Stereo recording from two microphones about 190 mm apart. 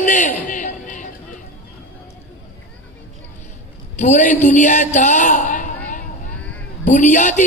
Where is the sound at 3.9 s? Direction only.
40° left (ahead or behind).